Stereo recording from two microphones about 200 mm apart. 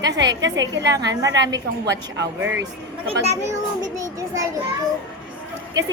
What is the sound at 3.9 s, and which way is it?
Speech, 15° right (ahead or behind).